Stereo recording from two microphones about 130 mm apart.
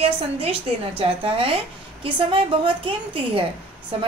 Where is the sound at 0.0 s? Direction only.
45° right (ahead or behind).